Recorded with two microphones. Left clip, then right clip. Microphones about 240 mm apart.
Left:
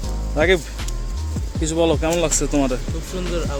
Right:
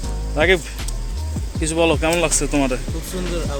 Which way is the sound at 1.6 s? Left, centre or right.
Centre.